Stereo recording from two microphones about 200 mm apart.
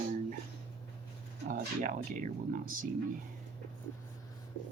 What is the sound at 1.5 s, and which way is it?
Speech, 40° right (ahead or behind).